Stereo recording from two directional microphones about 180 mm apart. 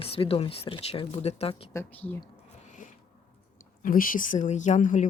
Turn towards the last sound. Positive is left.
turn(degrees=45)  # may be behind; listen again after turning